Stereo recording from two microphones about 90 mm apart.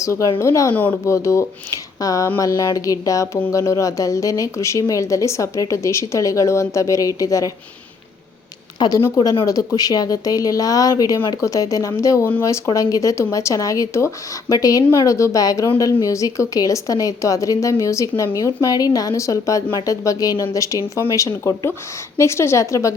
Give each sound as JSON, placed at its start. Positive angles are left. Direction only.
{"t": 0.0, "sound": "speech", "side_deg": 35}
{"t": 0.7, "sound": "speech", "side_deg": 20}
{"t": 1.0, "sound": "speech", "side_deg": 35}
{"t": 9.7, "sound": "speech", "side_deg": 45}